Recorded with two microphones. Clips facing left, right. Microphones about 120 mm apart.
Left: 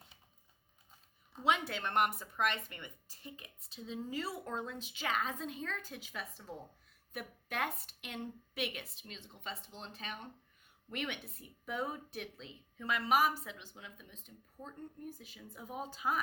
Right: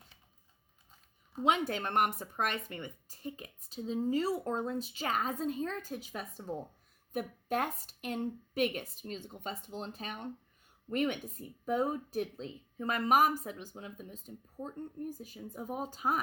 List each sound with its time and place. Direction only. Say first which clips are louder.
1.5 s a woman's voice: right 3 dB; 45° right (ahead or behind)